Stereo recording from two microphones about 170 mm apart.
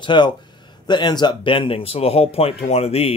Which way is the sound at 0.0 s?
25° left (ahead or behind).